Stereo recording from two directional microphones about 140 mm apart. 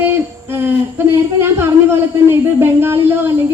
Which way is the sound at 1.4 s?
15° right (ahead or behind).